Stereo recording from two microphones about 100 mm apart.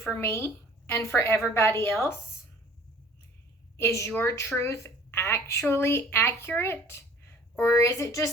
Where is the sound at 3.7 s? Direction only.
30° left (ahead or behind).